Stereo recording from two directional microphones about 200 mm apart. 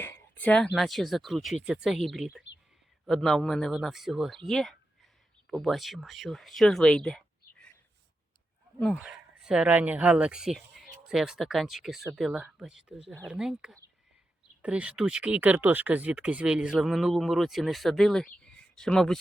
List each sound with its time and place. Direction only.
0.0 s speech: 10° left (ahead or behind)
8.8 s speech: centre (ahead or behind)